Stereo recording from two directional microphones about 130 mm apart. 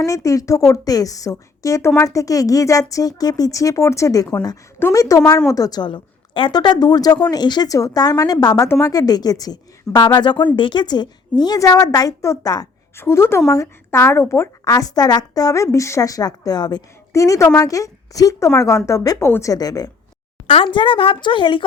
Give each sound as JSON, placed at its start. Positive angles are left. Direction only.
{"t": 0.0, "sound": "a woman's voice", "side_deg": 25}